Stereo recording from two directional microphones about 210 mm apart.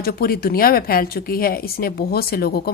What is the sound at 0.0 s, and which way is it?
A woman's voice, 45° left (ahead or behind).